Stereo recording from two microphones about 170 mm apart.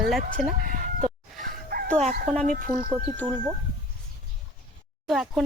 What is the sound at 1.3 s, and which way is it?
Chicken, 60° right (ahead or behind).